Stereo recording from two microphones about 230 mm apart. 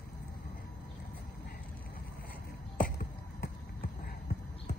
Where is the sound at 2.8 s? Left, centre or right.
Left.